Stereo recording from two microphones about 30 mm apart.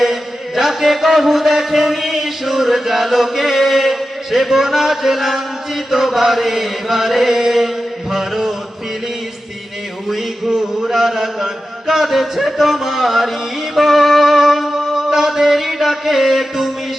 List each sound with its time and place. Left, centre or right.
0.0 s chant: centre
8.1 s a sound: centre
10.1 s mantra: centre
13.7 s music: centre